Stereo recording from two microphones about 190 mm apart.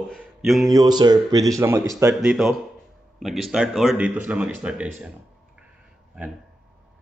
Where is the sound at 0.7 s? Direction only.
20° right (ahead or behind).